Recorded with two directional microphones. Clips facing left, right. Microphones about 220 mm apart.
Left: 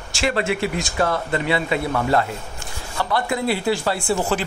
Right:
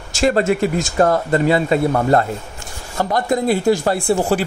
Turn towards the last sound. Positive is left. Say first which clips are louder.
# right 5 dB
turn(degrees=-40)  # may be behind; listen again after turning